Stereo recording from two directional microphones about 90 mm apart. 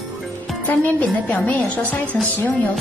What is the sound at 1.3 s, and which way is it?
Speech, 15° left (ahead or behind).